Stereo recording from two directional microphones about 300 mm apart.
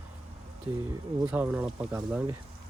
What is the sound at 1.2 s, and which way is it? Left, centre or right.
Speech, centre.